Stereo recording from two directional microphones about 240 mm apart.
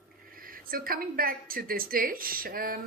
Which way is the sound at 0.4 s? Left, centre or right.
Right.